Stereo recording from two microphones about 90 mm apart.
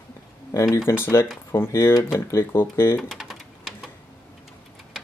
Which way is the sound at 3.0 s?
Centre (ahead or behind).